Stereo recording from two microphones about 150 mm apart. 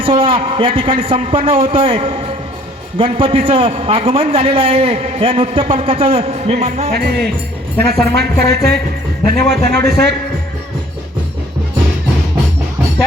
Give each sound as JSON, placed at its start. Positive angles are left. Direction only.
{"t": 0.0, "sound": "a man's voice", "side_deg": -35}
{"t": 6.9, "sound": "speech", "side_deg": -90}